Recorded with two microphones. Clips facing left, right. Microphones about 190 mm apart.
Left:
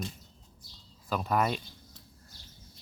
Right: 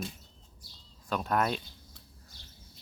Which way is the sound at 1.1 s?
Centre (ahead or behind).